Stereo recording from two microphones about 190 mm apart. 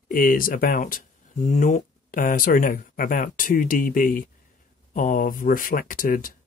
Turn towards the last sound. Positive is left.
turn(degrees=50)  # may be behind; listen again after turning